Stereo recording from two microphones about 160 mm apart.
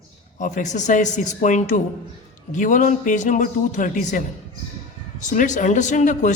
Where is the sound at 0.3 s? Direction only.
50° left (ahead or behind).